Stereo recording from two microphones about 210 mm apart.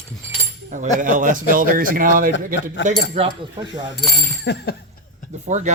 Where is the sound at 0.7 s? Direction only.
35° right (ahead or behind).